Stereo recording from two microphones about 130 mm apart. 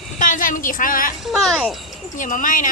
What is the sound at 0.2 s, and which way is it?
Speech, 90° left.